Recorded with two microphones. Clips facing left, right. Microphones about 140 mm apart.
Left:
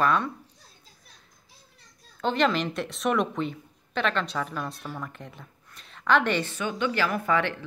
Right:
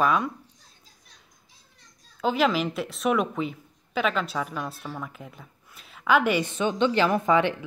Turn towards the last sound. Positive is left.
turn(degrees=-20)  # may be behind; listen again after turning